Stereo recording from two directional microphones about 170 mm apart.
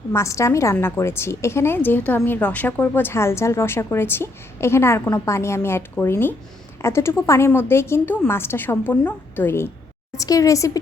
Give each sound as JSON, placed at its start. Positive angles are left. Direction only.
{"t": 0.1, "sound": "a woman's voice", "side_deg": 15}